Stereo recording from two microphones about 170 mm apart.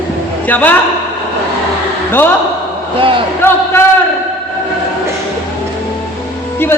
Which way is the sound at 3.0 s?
30° right (ahead or behind).